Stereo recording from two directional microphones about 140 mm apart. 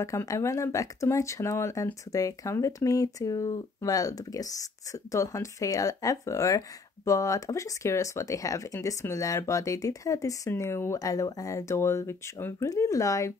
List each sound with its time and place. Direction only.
0.0 s speech: 25° left (ahead or behind)